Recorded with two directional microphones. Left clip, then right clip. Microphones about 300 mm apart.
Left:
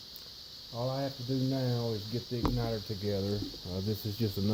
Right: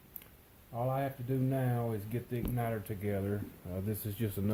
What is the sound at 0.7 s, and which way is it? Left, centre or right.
Speech, centre.